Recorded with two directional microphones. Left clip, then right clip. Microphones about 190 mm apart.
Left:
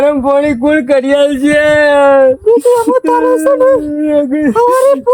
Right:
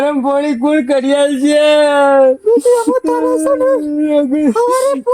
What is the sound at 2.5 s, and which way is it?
Speech, 25° left (ahead or behind).